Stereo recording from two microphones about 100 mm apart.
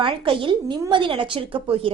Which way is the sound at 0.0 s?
60° right (ahead or behind).